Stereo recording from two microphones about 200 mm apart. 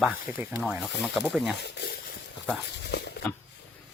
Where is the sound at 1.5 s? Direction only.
55° left (ahead or behind).